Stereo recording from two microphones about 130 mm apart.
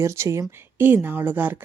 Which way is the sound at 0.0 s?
20° right (ahead or behind).